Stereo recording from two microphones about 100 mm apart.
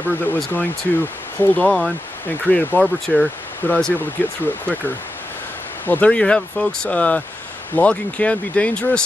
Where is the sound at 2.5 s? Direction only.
15° left (ahead or behind).